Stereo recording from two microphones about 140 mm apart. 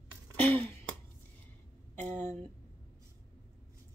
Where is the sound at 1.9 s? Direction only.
15° left (ahead or behind).